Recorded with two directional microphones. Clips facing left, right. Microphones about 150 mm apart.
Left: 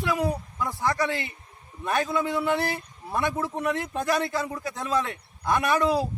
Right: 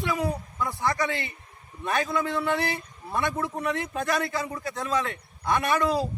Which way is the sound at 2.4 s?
5° left (ahead or behind).